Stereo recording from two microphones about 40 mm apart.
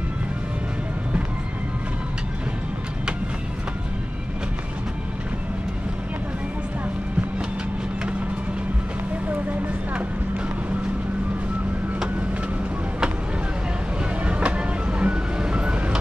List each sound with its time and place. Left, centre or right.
14.2 s music: right